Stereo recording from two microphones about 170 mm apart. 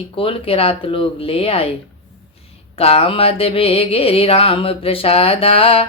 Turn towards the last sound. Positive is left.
turn(degrees=35)  # may be behind; listen again after turning